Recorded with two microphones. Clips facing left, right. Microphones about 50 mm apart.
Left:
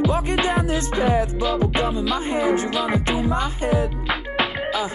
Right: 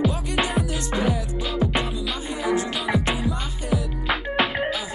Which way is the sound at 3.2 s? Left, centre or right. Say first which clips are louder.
Left 6 dB; left.